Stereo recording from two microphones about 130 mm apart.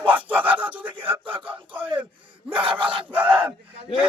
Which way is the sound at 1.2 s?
40° right (ahead or behind).